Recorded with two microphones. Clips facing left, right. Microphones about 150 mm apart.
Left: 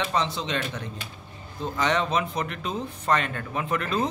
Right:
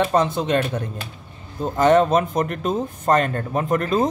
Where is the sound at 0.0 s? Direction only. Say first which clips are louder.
Right 8 dB; 50° right (ahead or behind).